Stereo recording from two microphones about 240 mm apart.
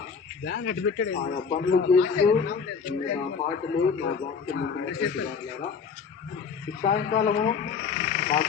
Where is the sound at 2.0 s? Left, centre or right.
Left.